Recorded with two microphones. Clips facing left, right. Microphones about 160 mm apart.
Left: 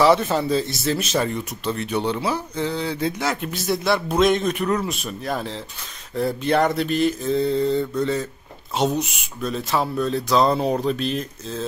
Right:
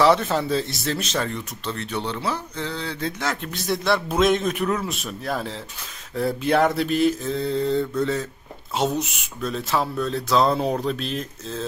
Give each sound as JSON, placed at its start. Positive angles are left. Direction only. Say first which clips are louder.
{"t": 0.0, "sound": "speech", "louder": "left 1 dB", "side_deg": 5}